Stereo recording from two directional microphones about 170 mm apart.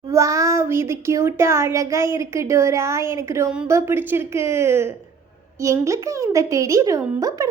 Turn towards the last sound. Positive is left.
turn(degrees=-20)  # may be behind; listen again after turning